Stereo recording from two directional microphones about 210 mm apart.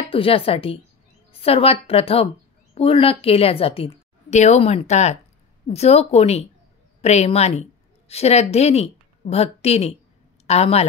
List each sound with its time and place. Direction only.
0.1 s a woman's voice: 25° left (ahead or behind)